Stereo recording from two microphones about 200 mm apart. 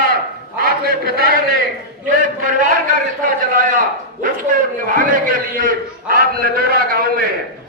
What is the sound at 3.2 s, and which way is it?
Speech, 40° right (ahead or behind).